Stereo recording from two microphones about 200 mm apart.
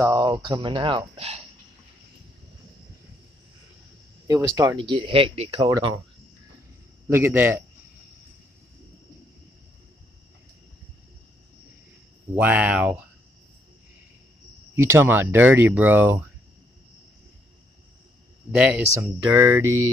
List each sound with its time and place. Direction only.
0.0 s speech: 20° right (ahead or behind)
4.6 s speech: 20° right (ahead or behind)
7.1 s speech: 10° right (ahead or behind)
12.4 s speech: 5° right (ahead or behind)
14.8 s speech: 15° right (ahead or behind)
18.5 s speech: 5° right (ahead or behind)
19.6 s mantra: 90° right